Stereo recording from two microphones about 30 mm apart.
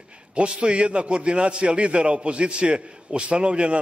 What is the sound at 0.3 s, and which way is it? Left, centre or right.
A man's voice, right.